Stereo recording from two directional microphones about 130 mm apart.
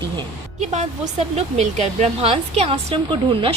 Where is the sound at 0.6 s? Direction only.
65° right (ahead or behind).